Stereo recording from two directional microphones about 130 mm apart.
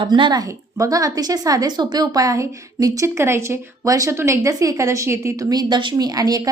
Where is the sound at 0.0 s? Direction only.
35° right (ahead or behind).